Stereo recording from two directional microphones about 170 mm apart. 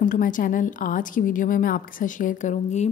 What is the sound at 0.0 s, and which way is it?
A woman's voice, 50° left (ahead or behind).